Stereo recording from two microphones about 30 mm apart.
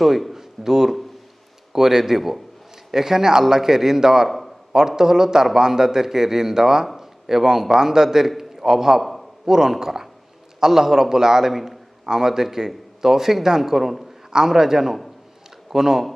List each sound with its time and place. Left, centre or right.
0.0 s a man's voice: centre
0.3 s a sound: centre
1.7 s a man's voice: centre
4.3 s a man's voice: centre
4.7 s a man's voice: centre
9.0 s a sound: centre
9.5 s a man's voice: centre
12.0 s a man's voice: centre
14.3 s a man's voice: centre